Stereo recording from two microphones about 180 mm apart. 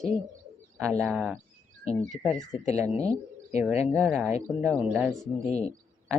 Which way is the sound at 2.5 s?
40° left (ahead or behind).